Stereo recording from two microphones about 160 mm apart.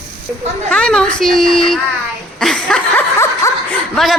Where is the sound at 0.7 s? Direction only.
5° left (ahead or behind).